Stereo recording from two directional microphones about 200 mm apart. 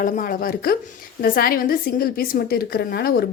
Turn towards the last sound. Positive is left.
turn(degrees=50)  # may be behind; listen again after turning